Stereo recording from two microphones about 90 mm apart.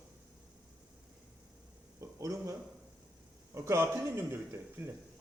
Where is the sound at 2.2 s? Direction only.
40° right (ahead or behind).